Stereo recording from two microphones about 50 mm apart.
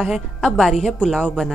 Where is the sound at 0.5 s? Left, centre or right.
Centre.